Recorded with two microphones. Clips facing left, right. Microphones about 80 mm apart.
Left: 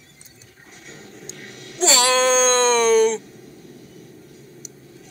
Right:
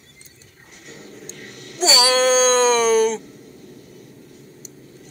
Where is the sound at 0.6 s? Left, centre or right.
Left.